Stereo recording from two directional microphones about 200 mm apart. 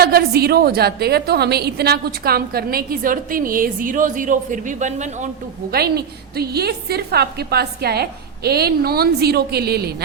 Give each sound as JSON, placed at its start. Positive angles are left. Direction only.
{"t": 0.0, "sound": "a woman's voice", "side_deg": -50}
{"t": 5.7, "sound": "a woman's voice", "side_deg": -50}